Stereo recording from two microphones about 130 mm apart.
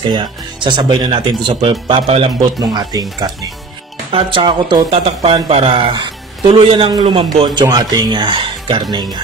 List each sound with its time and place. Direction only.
0.0 s speech: 35° right (ahead or behind)
2.6 s speech: 30° right (ahead or behind)
4.1 s speech: 40° right (ahead or behind)
7.4 s speech: 30° right (ahead or behind)